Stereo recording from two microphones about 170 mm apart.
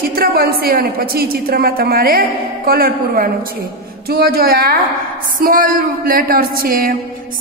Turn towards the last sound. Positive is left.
turn(degrees=-60)  # may be behind; listen again after turning